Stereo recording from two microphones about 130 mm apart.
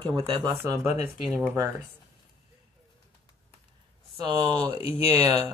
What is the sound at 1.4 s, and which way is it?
Speech, 20° right (ahead or behind).